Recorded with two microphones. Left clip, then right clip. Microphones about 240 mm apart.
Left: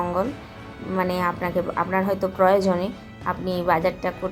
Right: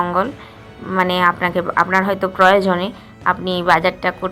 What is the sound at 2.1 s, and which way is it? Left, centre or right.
Speech, right.